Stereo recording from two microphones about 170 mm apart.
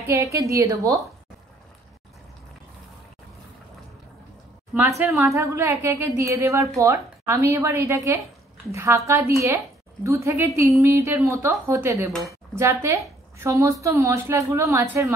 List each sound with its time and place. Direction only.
0.0 s a woman's voice: 20° right (ahead or behind)
4.7 s a woman's voice: 15° right (ahead or behind)